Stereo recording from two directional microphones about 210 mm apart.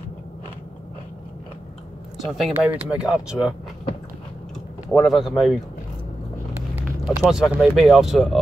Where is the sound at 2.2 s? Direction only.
Centre (ahead or behind).